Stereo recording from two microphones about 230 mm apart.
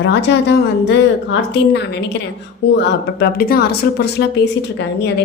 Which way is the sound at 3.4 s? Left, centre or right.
Left.